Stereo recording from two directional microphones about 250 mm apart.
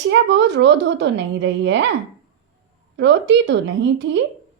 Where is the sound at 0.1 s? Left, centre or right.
Right.